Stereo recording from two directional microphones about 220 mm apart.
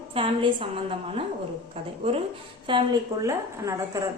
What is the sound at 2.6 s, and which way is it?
A woman's voice, 20° right (ahead or behind).